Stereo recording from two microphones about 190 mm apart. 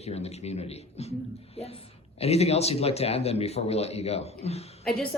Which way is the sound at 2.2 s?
35° left (ahead or behind).